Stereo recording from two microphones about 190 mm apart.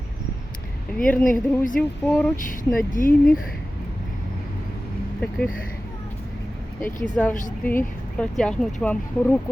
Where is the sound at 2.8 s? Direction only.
45° left (ahead or behind).